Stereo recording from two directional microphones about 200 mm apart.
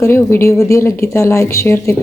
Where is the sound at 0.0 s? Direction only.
15° left (ahead or behind).